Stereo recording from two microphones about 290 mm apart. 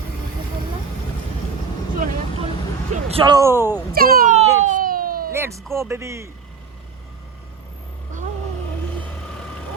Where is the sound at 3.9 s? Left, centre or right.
Right.